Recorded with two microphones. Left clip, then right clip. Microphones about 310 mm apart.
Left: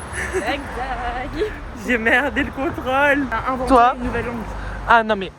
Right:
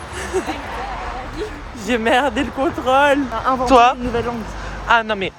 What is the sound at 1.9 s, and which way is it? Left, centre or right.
Speech, centre.